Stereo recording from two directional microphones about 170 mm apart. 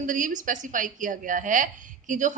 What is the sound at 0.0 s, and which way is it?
A woman's voice, 50° right (ahead or behind).